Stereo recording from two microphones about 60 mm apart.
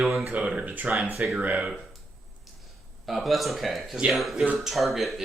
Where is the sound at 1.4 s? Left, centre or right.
Right.